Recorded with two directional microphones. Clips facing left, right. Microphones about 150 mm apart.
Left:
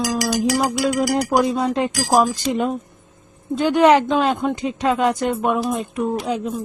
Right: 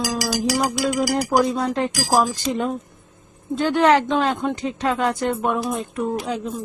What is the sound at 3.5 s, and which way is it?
Speech, 15° left (ahead or behind).